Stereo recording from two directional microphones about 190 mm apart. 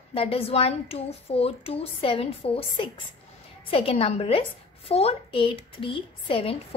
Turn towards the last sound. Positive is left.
turn(degrees=25)  # may be behind; listen again after turning